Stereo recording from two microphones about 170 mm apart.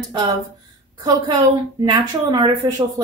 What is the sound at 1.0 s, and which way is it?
Speech, 25° right (ahead or behind).